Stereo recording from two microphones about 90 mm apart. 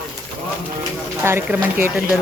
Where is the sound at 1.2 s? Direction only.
25° right (ahead or behind).